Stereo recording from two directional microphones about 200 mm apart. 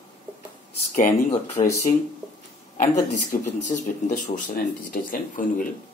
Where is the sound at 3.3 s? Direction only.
40° left (ahead or behind).